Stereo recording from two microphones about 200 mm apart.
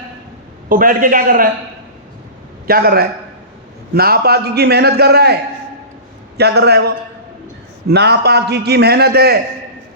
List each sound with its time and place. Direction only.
0.7 s a man's voice: 45° right (ahead or behind)
2.6 s a man's voice: 50° right (ahead or behind)